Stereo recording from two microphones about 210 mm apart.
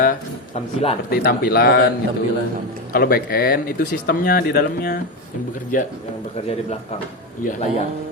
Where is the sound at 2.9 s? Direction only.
45° left (ahead or behind).